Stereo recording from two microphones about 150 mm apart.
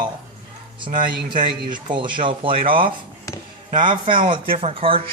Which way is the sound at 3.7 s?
60° right (ahead or behind).